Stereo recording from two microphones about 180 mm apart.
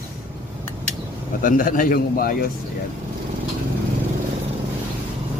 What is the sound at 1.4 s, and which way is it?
Speech, 50° left (ahead or behind).